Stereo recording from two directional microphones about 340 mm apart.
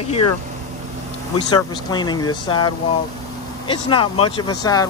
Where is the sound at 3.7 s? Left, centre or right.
Centre.